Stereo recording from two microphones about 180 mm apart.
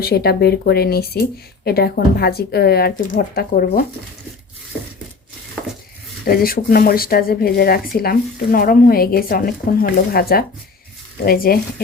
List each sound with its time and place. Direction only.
0.0 s speech: 60° left (ahead or behind)
5.6 s a sound: 5° left (ahead or behind)
6.2 s speech: 55° left (ahead or behind)